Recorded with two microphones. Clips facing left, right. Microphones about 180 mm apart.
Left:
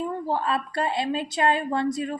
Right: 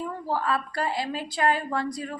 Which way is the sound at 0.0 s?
25° left (ahead or behind).